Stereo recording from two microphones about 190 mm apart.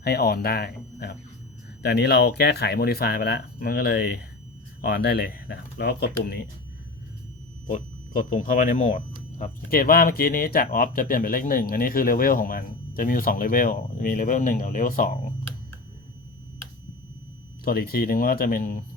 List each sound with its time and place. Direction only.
0.0 s speech: 55° left (ahead or behind)
7.7 s speech: 45° left (ahead or behind)
17.7 s speech: 50° left (ahead or behind)